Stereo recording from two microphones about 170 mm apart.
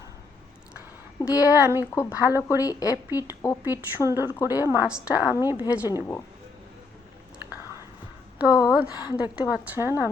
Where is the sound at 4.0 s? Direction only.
15° right (ahead or behind).